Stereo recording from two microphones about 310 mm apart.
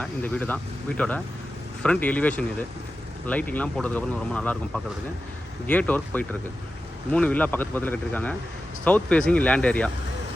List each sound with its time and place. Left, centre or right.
0.0 s speech: centre